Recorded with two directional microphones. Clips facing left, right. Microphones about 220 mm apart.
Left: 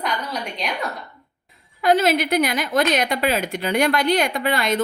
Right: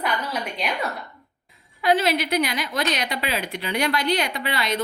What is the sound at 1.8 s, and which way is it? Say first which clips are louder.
A woman's voice: left 3 dB; 45° left (ahead or behind).